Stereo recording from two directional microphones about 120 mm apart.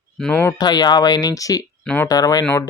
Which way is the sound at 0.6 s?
35° left (ahead or behind).